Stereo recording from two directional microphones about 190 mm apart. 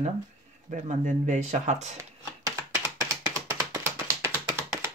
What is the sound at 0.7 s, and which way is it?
Speech, 40° right (ahead or behind).